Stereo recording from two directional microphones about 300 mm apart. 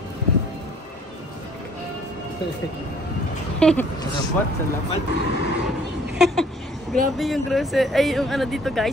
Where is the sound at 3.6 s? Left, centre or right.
Centre.